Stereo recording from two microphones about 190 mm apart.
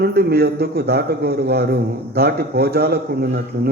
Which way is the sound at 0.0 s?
55° right (ahead or behind).